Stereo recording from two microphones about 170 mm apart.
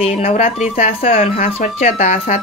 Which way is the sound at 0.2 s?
40° left (ahead or behind).